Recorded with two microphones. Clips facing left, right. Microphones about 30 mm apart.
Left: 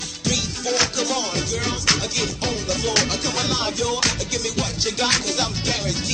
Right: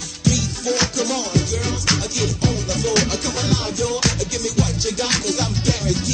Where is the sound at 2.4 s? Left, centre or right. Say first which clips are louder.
Right 2 dB; centre.